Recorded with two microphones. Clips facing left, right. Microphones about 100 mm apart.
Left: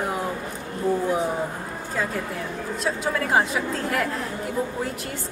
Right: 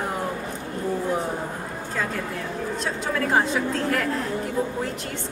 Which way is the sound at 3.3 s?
5° left (ahead or behind).